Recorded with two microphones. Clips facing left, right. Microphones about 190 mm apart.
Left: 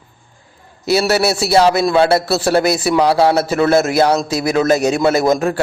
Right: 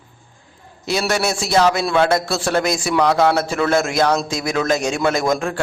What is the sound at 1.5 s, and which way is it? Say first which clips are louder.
Speech: left 3 dB; 35° left (ahead or behind).